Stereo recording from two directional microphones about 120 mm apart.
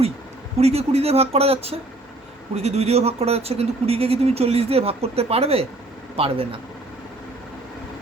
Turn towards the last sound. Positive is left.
turn(degrees=-50)  # may be behind; listen again after turning